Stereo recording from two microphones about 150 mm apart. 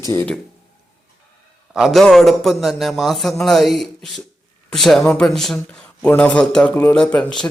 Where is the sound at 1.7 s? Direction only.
Centre (ahead or behind).